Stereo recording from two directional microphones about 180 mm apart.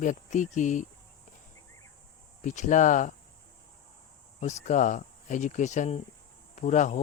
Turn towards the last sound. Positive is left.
turn(degrees=40)  # may be behind; listen again after turning